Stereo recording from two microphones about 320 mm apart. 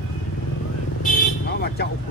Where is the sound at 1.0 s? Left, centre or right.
Left.